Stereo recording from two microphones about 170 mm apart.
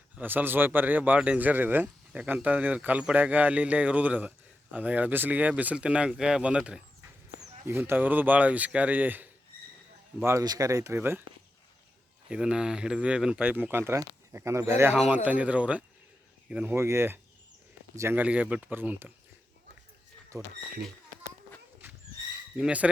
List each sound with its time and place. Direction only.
0.2 s speech: 10° right (ahead or behind)
12.3 s speech: 5° right (ahead or behind)
20.3 s speech: 15° right (ahead or behind)
22.5 s speech: 5° right (ahead or behind)